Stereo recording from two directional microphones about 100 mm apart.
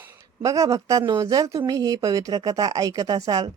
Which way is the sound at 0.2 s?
35° right (ahead or behind).